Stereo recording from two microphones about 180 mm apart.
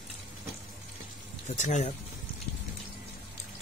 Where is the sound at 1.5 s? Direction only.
40° left (ahead or behind).